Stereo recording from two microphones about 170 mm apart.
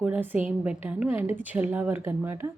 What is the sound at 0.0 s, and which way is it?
Speech, 10° right (ahead or behind).